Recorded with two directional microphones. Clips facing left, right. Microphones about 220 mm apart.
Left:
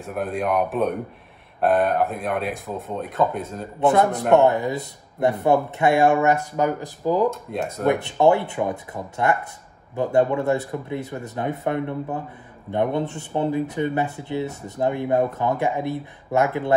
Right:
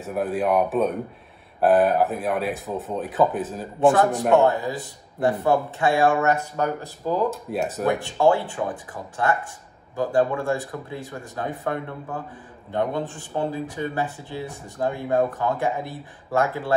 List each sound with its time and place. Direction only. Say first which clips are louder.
0.0 s speech: right 2 dB; centre (ahead or behind)
4.4 s speech: left 2 dB; 20° left (ahead or behind)
7.5 s speech: right 1 dB; 5° right (ahead or behind)
8.0 s speech: left 1 dB; 20° left (ahead or behind)